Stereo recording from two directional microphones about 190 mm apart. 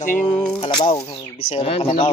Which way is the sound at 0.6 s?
30° left (ahead or behind).